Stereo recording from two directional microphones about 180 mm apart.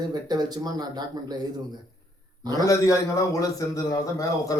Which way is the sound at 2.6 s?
20° left (ahead or behind).